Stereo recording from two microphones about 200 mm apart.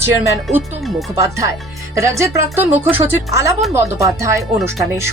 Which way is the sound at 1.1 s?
15° right (ahead or behind).